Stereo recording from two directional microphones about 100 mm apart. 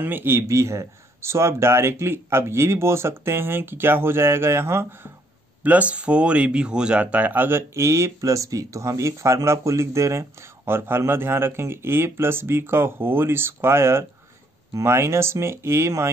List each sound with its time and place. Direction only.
0.0 s speech: 20° right (ahead or behind)
5.6 s speech: 15° right (ahead or behind)